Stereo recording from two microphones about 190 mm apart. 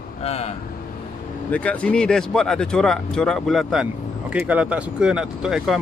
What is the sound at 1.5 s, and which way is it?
Speech, 5° left (ahead or behind).